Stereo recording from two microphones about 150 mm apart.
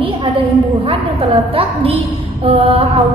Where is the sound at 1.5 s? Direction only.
35° right (ahead or behind).